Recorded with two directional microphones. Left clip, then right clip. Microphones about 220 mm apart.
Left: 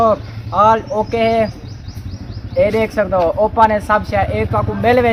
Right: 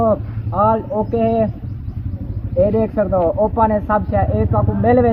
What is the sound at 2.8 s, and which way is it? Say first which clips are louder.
Speech: left 2 dB; 10° left (ahead or behind).